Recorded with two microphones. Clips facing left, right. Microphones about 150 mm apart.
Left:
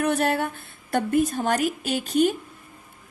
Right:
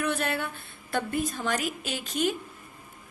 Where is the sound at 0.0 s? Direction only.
40° left (ahead or behind).